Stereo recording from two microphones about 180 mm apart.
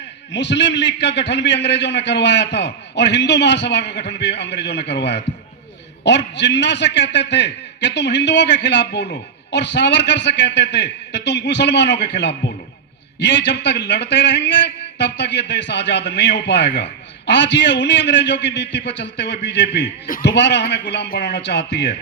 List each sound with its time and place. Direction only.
0.3 s a man's voice: 75° left (ahead or behind)